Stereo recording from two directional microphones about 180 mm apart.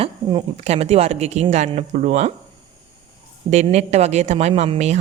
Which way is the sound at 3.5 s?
40° right (ahead or behind).